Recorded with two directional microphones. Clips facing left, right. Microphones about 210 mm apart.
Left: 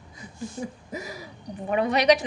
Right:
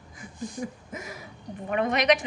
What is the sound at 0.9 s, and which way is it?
Gasp, 35° left (ahead or behind).